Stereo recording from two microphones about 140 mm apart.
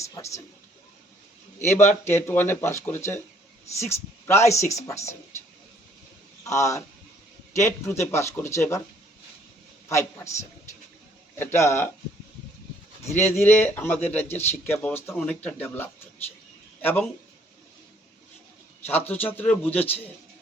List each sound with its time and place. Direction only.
0.0 s speech: 20° left (ahead or behind)
1.5 s speech: 15° left (ahead or behind)
6.4 s a man's voice: 20° left (ahead or behind)
9.9 s speech: 20° left (ahead or behind)
11.3 s speech: 20° left (ahead or behind)
13.1 s speech: 15° left (ahead or behind)
18.9 s speech: 15° left (ahead or behind)